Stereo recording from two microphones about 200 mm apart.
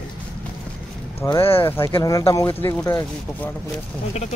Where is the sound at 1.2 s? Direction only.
15° left (ahead or behind).